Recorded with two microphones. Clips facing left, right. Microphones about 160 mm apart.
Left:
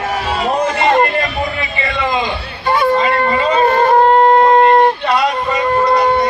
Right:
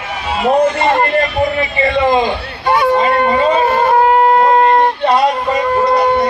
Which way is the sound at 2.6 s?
15° right (ahead or behind).